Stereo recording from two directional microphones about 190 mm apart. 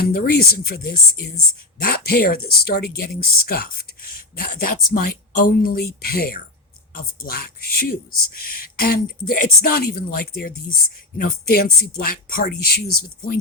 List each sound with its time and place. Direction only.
0.1 s speech: 50° left (ahead or behind)